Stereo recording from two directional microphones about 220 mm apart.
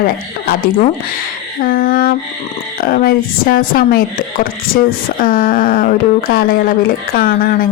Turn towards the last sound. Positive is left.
turn(degrees=40)  # may be behind; listen again after turning